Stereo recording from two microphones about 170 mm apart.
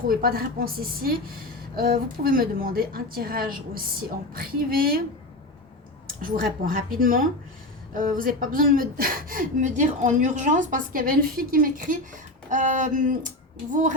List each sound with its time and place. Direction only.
0.1 s a woman's voice: 60° right (ahead or behind)
6.2 s a woman's voice: 60° right (ahead or behind)